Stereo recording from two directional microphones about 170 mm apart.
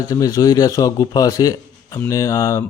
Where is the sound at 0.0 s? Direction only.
20° left (ahead or behind).